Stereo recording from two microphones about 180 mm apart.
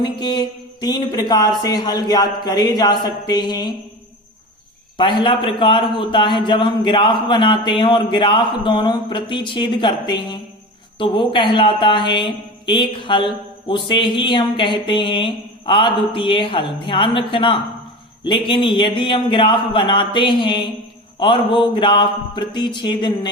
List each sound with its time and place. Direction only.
0.0 s speech: 25° left (ahead or behind)
4.9 s speech: 25° left (ahead or behind)